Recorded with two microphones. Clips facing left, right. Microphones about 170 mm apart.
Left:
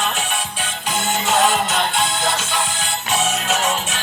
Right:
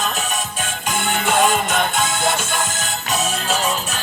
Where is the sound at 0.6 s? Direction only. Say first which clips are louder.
Right 1 dB; 60° right (ahead or behind).